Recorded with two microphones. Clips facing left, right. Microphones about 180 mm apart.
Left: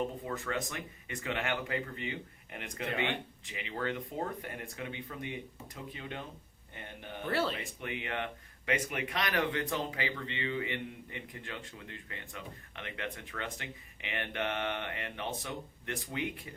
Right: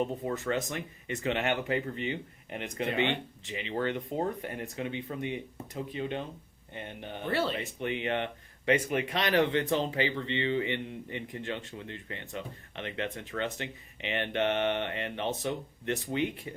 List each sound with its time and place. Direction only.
0.3 s speech: 25° right (ahead or behind)
7.3 s speech: centre (ahead or behind)
7.6 s speech: 25° right (ahead or behind)